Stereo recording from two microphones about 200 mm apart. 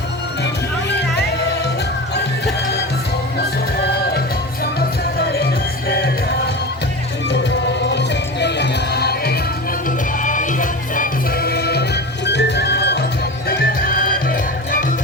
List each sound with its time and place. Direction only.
5.1 s music: 50° left (ahead or behind)
7.9 s music: 60° left (ahead or behind)
10.2 s music: 40° left (ahead or behind)